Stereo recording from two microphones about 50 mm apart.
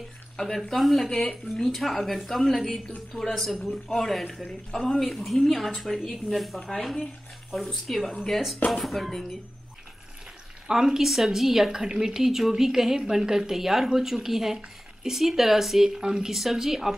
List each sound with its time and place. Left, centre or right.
0.7 s a woman's voice: centre
1.1 s a woman's voice: centre
10.7 s speech: centre